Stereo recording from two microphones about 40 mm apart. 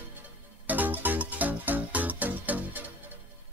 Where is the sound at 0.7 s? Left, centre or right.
Right.